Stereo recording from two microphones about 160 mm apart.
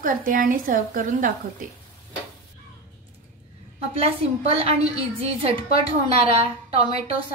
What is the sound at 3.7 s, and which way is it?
A woman's voice, 35° right (ahead or behind).